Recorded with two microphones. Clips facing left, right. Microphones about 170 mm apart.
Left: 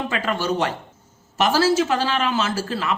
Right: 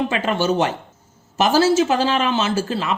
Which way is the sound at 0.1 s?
25° right (ahead or behind).